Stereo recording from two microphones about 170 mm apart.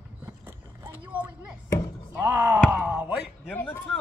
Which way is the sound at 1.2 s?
20° left (ahead or behind).